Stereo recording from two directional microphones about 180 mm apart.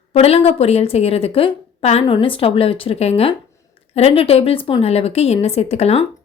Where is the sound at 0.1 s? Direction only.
35° left (ahead or behind).